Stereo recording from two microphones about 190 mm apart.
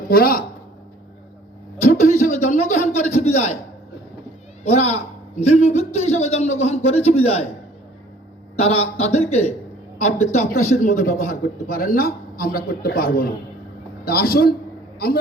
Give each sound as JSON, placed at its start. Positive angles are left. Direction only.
{"t": 0.1, "sound": "a man's voice", "side_deg": 50}
{"t": 2.1, "sound": "a man's voice", "side_deg": 35}
{"t": 4.6, "sound": "a man's voice", "side_deg": 35}
{"t": 8.5, "sound": "a man's voice", "side_deg": 35}
{"t": 10.5, "sound": "a man's voice", "side_deg": 50}